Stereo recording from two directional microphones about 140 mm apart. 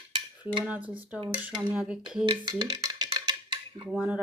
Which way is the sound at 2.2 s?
30° right (ahead or behind).